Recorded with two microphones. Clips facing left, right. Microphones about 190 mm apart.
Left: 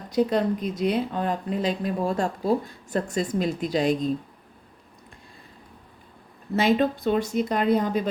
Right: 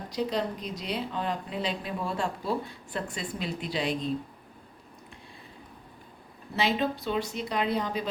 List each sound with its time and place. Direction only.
0.1 s speech: 50° left (ahead or behind)
6.6 s speech: 50° left (ahead or behind)